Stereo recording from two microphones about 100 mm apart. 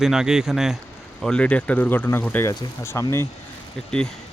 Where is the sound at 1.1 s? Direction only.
5° left (ahead or behind); by 3.0 s 30° left (ahead or behind).